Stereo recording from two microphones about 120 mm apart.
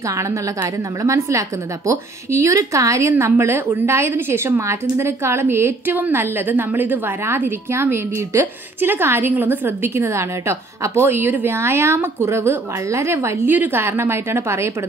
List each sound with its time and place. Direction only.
0.2 s speech: 25° right (ahead or behind)